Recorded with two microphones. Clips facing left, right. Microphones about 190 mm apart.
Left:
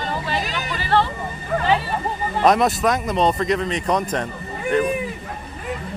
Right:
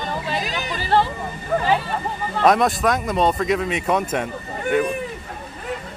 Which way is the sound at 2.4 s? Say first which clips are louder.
Even; centre (ahead or behind).